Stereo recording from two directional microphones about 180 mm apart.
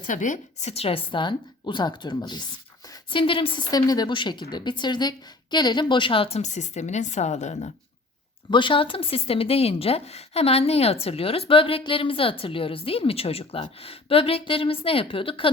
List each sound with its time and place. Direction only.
0.0 s a woman's voice: 45° left (ahead or behind)
8.4 s speech: 25° left (ahead or behind)